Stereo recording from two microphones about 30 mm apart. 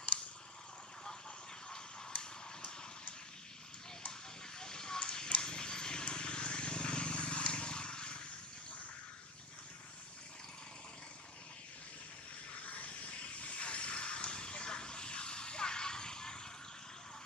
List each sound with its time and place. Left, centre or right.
1.7 s a sound: left
4.6 s vehicle: left
12.5 s vehicle: left